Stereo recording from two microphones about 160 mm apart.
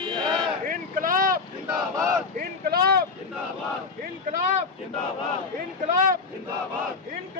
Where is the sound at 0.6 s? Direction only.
60° right (ahead or behind).